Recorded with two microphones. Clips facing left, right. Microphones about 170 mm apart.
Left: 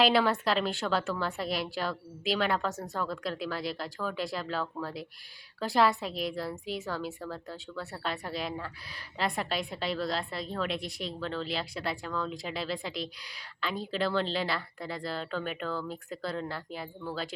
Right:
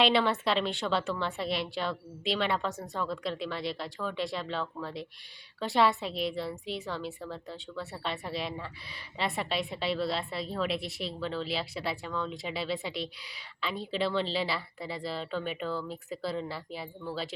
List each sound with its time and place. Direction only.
0.0 s a woman's voice: centre (ahead or behind)